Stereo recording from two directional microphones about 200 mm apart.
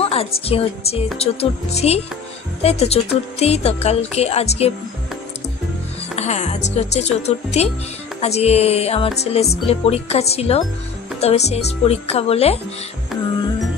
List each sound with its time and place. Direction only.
0.0 s a woman's voice: 30° left (ahead or behind)
6.1 s speech: 35° left (ahead or behind)
13.1 s music: centre (ahead or behind)